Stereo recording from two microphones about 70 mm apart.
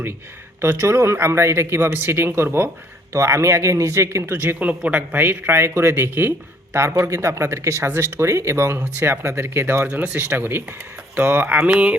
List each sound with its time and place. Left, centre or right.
0.6 s a man's voice: right
3.1 s a man's voice: right
9.8 s a man's voice: right
11.5 s mantra: centre